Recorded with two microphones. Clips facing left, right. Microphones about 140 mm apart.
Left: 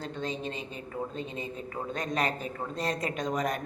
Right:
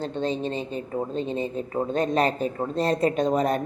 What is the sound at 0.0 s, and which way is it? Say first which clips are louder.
A woman's voice: right 8 dB; 30° right (ahead or behind).